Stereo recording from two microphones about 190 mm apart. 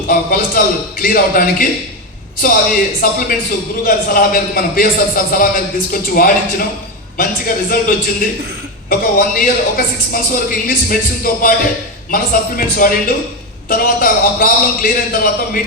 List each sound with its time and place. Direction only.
0.1 s a man's voice: 50° left (ahead or behind)